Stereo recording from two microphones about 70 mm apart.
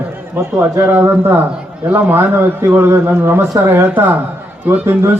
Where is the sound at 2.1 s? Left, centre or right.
Right.